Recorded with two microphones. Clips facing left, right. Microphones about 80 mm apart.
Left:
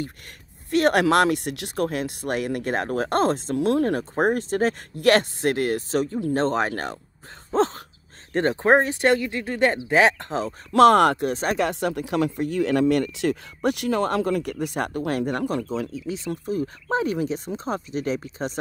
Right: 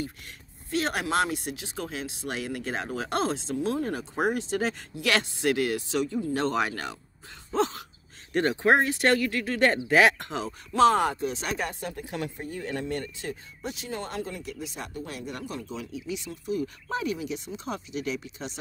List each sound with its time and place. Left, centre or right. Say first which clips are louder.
0.7 s speech: left 9 dB; left
3.5 s speech: left 8 dB; left
4.0 s speech: left 5 dB; left
10.7 s speech: left 6 dB; left
15.1 s speech: left 12 dB; left